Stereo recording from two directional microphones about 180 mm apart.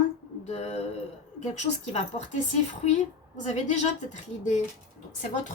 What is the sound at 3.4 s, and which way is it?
Speech, 40° left (ahead or behind).